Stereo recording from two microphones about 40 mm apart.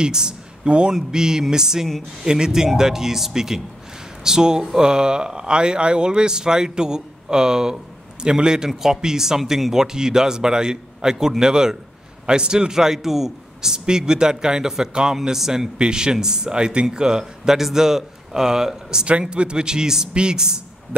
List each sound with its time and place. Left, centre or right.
0.0 s a man's voice: centre
8.6 s a man's voice: centre
19.0 s a man's voice: right